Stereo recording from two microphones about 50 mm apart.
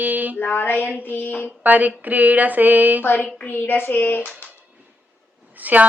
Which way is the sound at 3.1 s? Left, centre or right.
Left.